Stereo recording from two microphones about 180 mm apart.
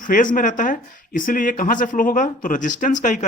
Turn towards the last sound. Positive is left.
turn(degrees=45)  # may be behind; listen again after turning